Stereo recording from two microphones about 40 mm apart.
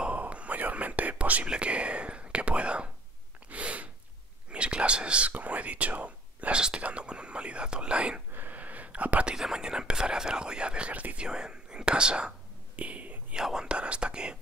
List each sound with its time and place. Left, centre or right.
0.2 s whispering: right
1.5 s speech: right
3.4 s gasp: right
4.5 s whispering: right
5.3 s speech: right
8.3 s a sound: right
8.5 s a sound: right
9.3 s speech: centre
10.9 s speech: right
11.1 s speech: right
12.7 s whispering: right
13.4 s speech: centre
13.7 s speech: right